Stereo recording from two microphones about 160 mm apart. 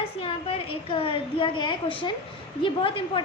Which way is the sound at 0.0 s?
35° left (ahead or behind).